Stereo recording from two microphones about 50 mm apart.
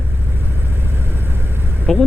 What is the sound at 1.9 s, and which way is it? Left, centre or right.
Speech, centre.